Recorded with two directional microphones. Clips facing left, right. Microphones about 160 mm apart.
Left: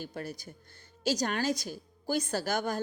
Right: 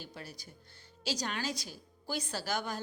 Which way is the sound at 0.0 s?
50° left (ahead or behind).